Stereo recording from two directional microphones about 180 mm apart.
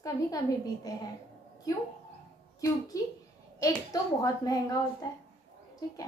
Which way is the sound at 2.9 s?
20° left (ahead or behind).